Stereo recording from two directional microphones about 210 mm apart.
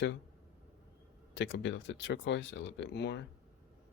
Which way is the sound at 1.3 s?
60° left (ahead or behind).